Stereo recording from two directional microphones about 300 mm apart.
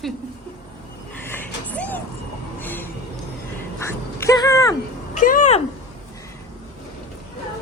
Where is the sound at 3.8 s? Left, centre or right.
Centre.